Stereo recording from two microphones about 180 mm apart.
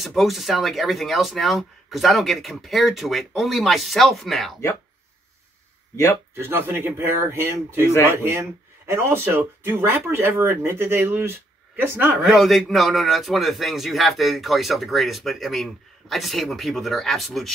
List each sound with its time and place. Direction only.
0.0 s speech: centre (ahead or behind)
6.3 s speech: 15° right (ahead or behind)